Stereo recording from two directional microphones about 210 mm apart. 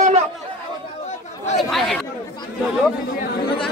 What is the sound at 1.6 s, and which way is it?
Speech, centre (ahead or behind).